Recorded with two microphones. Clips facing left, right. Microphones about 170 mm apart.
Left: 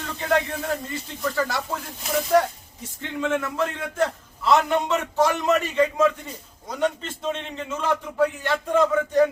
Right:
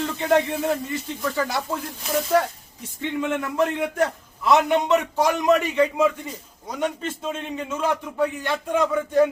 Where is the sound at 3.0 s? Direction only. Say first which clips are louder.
Even; 15° right (ahead or behind).